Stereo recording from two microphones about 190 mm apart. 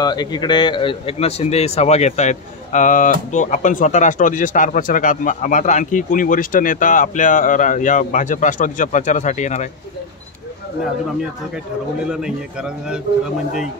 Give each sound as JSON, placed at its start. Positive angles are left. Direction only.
{"t": 0.0, "sound": "a man's voice", "side_deg": 20}
{"t": 12.1, "sound": "a man's voice", "side_deg": -5}